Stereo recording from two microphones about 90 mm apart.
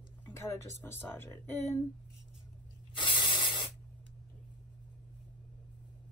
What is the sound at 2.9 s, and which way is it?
Spray, 65° left (ahead or behind).